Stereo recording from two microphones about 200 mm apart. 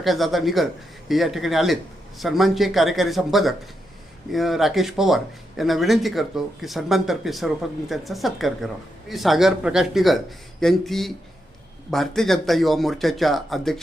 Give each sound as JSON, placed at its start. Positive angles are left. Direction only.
{"t": 0.0, "sound": "speech", "side_deg": 0}